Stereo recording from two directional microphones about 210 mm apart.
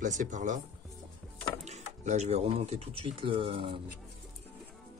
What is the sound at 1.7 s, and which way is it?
Speech, 35° right (ahead or behind).